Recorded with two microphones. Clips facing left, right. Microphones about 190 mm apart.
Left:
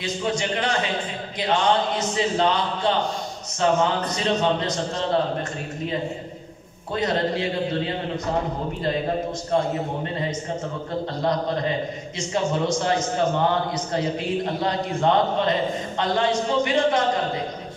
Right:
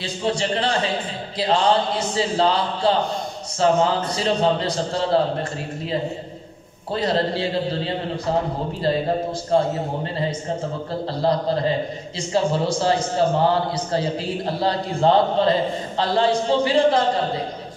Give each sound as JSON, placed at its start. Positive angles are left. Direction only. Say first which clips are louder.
{"t": 0.0, "sound": "a man's voice", "louder": "right 2 dB", "side_deg": -30}
{"t": 6.9, "sound": "a man's voice", "louder": "right 2 dB", "side_deg": -30}
{"t": 9.5, "sound": "a man's voice", "louder": "right 3 dB", "side_deg": -30}
{"t": 11.1, "sound": "a man's voice", "louder": "right 4 dB", "side_deg": -30}